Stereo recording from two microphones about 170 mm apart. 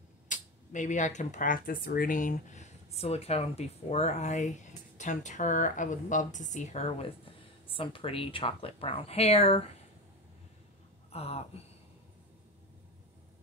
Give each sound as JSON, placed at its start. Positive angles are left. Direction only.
{"t": 0.3, "sound": "speech", "side_deg": 45}
{"t": 11.1, "sound": "speech", "side_deg": 35}